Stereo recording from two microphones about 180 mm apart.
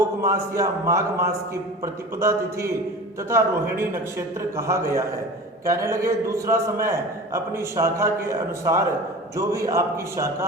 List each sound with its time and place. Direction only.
0.0 s a man's voice: 15° right (ahead or behind)